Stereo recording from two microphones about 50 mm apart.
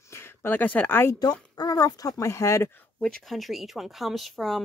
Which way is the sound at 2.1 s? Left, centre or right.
Left.